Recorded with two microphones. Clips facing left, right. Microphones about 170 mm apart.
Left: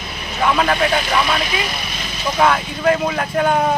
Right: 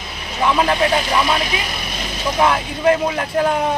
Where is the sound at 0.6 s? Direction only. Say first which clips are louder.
Right 2 dB; 25° right (ahead or behind).